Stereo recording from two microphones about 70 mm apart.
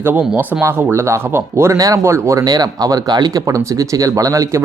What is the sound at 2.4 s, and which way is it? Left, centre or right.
Speech, right.